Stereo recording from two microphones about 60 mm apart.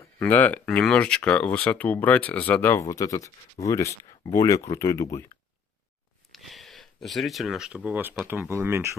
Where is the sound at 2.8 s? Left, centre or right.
Left.